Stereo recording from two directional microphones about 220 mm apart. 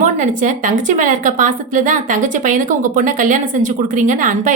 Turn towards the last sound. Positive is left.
turn(degrees=-35)  # may be behind; listen again after turning